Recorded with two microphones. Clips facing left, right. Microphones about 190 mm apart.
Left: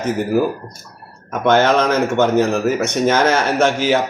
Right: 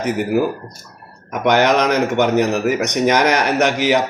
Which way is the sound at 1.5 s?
15° right (ahead or behind).